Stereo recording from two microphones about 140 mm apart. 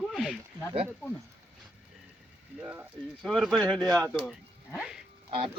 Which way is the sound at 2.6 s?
10° right (ahead or behind).